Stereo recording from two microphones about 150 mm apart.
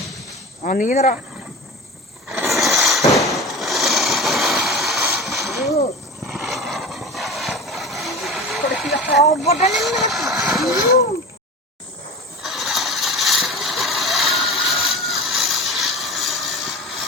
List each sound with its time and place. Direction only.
0.6 s speech: 60° left (ahead or behind)
2.6 s a sound: centre (ahead or behind)
6.2 s vehicle: centre (ahead or behind)
9.2 s speech: 45° left (ahead or behind)
9.7 s speech: centre (ahead or behind)
12.4 s mechanisms: centre (ahead or behind)